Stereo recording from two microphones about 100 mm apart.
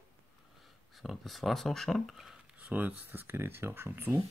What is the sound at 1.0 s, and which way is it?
Speech, centre (ahead or behind).